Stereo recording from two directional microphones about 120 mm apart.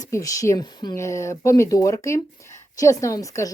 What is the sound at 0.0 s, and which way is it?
Speech, 30° left (ahead or behind).